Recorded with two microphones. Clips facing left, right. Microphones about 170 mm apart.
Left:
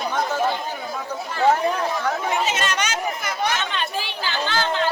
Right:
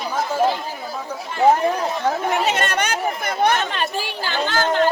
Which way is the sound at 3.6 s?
45° right (ahead or behind).